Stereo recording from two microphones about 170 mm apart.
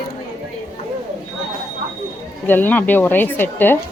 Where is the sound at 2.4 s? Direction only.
10° left (ahead or behind).